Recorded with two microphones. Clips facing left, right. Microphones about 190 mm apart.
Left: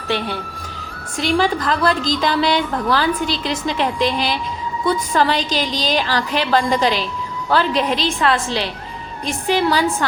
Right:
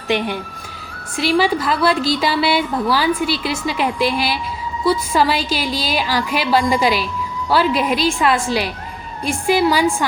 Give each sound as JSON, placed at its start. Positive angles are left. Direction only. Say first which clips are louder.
{"t": 0.1, "sound": "a woman's voice", "louder": "right 3 dB", "side_deg": -15}